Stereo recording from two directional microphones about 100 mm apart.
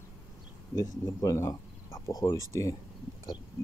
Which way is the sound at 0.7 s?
35° left (ahead or behind).